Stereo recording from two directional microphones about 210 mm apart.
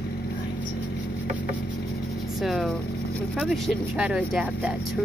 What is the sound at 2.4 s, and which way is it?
Speech, centre (ahead or behind).